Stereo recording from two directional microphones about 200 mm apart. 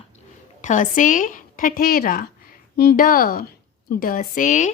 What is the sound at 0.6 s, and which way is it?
A woman's voice, 40° left (ahead or behind).